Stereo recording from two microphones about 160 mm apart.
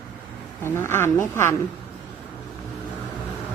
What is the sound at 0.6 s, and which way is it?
Speech, 15° left (ahead or behind).